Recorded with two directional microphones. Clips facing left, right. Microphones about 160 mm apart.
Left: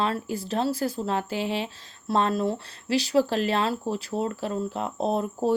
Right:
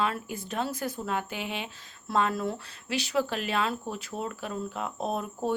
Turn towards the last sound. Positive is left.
turn(degrees=30)  # may be behind; listen again after turning